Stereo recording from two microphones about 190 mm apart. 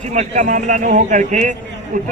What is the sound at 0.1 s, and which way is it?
Speech, 40° right (ahead or behind).